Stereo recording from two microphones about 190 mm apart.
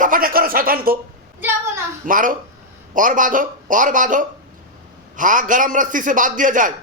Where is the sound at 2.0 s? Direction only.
45° right (ahead or behind).